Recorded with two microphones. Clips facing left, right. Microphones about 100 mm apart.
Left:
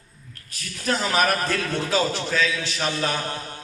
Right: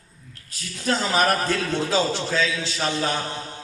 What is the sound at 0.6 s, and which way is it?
A man's voice, 25° right (ahead or behind).